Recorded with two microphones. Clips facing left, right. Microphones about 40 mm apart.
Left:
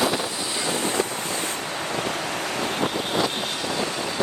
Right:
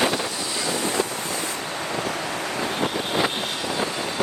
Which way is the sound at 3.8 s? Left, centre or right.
Right.